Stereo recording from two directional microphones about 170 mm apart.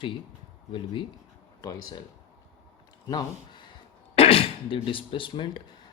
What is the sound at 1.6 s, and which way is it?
Speech, 20° left (ahead or behind).